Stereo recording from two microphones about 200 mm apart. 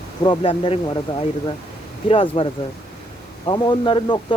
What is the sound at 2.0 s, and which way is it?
Speech, 25° left (ahead or behind).